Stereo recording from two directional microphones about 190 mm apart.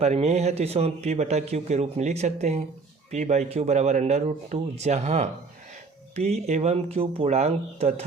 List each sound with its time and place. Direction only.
0.0 s speech: 35° right (ahead or behind)